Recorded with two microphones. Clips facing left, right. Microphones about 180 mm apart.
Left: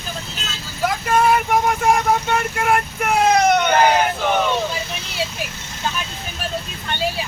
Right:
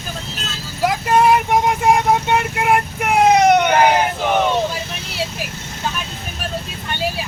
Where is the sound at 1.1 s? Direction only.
20° right (ahead or behind).